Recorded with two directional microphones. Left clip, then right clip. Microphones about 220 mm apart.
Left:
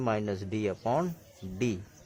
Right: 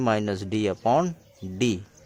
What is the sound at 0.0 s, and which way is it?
Speech, 45° right (ahead or behind).